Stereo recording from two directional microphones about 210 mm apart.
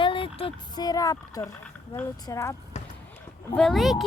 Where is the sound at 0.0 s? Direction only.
25° left (ahead or behind).